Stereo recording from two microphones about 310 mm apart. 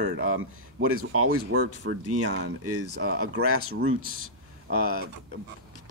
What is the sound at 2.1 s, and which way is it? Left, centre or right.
A man's voice, right.